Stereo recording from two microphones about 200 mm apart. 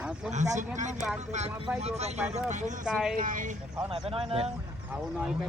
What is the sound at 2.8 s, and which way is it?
Speech, 5° right (ahead or behind).